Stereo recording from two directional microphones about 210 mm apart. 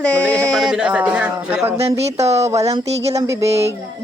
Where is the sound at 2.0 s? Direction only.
30° right (ahead or behind).